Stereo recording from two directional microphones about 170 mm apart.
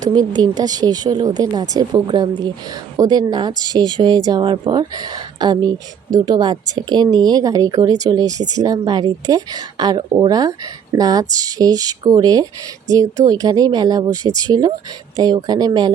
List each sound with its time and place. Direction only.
0.0 s speech: 25° right (ahead or behind)